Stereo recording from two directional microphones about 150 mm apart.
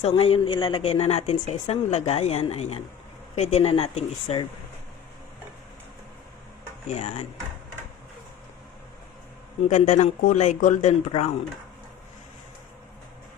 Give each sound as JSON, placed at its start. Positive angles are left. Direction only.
{"t": 0.0, "sound": "a woman's voice", "side_deg": 40}
{"t": 6.9, "sound": "a woman's voice", "side_deg": 45}
{"t": 9.6, "sound": "a woman's voice", "side_deg": 50}